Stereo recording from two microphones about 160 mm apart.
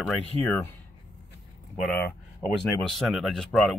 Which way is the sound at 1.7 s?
10° left (ahead or behind).